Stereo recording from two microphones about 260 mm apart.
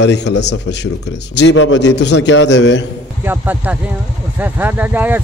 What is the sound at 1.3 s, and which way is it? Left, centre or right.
A man's voice, left.